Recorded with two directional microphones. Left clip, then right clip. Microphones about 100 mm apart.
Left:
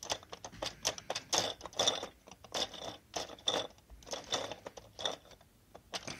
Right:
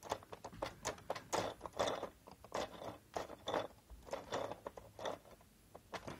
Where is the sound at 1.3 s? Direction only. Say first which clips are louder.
Left 6 dB; 15° left (ahead or behind).